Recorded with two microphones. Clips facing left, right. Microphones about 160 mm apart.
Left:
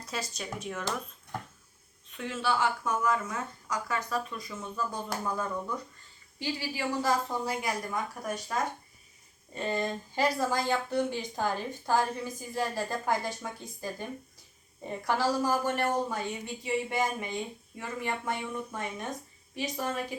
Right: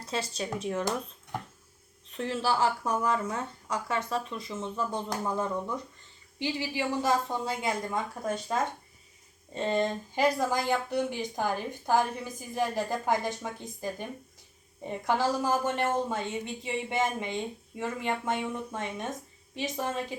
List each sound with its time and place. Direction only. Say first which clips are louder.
0.0 s a woman's voice: right 4 dB; 30° right (ahead or behind)
2.1 s a woman's voice: right 2 dB; 35° right (ahead or behind)